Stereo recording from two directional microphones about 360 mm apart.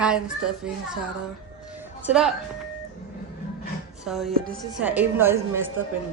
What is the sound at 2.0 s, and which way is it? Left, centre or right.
Speech, centre.